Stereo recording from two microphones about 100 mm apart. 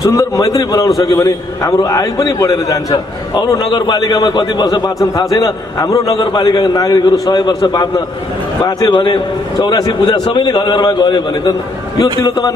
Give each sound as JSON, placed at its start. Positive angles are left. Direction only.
{"t": 0.0, "sound": "a man's voice", "side_deg": 35}
{"t": 3.6, "sound": "a man's voice", "side_deg": 50}
{"t": 6.1, "sound": "a man's voice", "side_deg": 45}